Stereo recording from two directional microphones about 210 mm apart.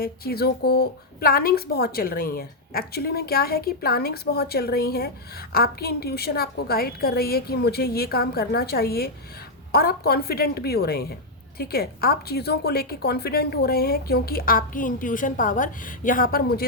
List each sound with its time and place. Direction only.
0.0 s a woman's voice: 45° left (ahead or behind)